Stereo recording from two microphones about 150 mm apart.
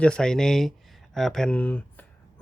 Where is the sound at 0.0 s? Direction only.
5° left (ahead or behind).